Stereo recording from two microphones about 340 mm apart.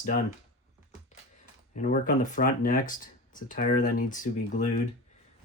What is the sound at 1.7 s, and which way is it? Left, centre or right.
Speech, left.